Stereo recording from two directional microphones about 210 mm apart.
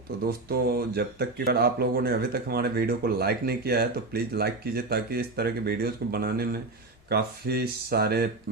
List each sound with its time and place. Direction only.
0.3 s speech: 45° right (ahead or behind)